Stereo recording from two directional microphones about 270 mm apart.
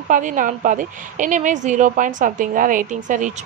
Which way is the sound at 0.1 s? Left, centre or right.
Right.